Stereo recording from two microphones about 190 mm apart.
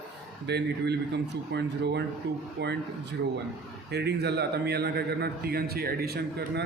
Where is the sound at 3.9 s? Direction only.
60° right (ahead or behind).